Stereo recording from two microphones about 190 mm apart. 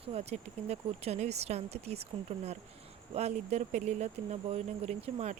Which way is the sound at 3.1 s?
35° right (ahead or behind).